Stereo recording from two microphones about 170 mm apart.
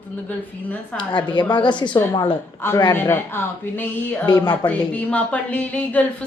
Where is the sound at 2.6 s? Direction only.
15° left (ahead or behind).